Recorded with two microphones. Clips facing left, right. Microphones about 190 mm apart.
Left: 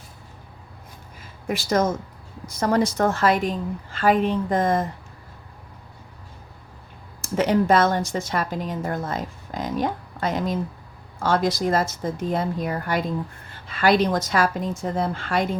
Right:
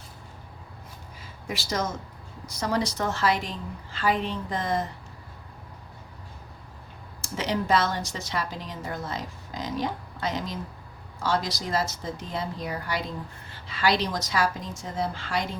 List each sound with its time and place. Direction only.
1.5 s a woman's voice: 50° left (ahead or behind)
7.2 s a woman's voice: 50° left (ahead or behind)